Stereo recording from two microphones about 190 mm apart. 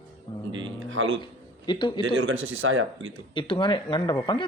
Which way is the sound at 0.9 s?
90° right.